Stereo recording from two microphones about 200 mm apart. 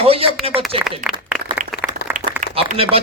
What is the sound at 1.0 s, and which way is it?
Speech, 40° right (ahead or behind).